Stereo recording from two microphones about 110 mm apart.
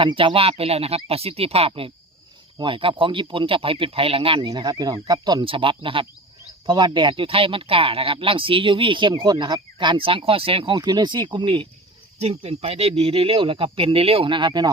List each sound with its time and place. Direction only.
0.0 s speech: 45° right (ahead or behind)
12.2 s speech: 65° right (ahead or behind); by 14.7 s 45° right (ahead or behind)